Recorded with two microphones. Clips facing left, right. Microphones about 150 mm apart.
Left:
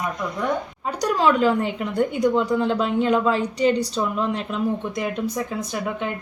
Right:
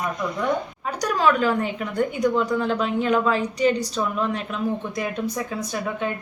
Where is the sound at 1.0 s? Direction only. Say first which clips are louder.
Left 2 dB; 25° left (ahead or behind).